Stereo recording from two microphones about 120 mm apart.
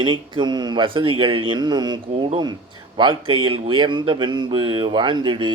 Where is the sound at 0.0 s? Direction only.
40° right (ahead or behind).